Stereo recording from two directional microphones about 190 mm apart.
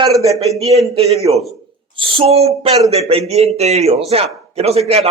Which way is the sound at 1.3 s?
20° right (ahead or behind).